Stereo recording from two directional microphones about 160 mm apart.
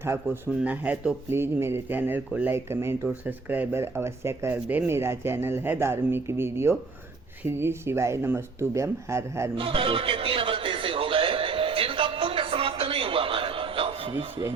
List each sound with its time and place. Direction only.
0.3 s speech: 15° right (ahead or behind)
9.6 s music: 35° right (ahead or behind)